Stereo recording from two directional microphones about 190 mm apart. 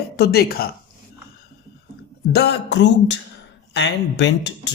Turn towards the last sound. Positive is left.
turn(degrees=65)  # may be behind; listen again after turning